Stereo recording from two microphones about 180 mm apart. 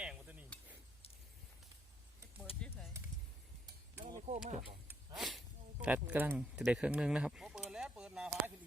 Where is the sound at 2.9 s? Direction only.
15° right (ahead or behind).